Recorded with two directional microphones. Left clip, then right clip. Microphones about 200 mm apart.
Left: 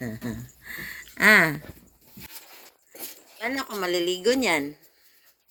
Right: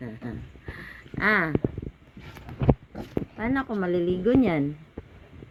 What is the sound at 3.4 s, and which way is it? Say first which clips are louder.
Speech: even; 5° left (ahead or behind).